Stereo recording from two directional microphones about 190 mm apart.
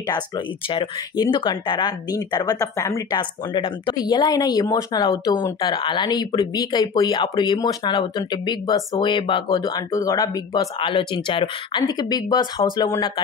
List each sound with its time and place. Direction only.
0.7 s speech: 25° left (ahead or behind)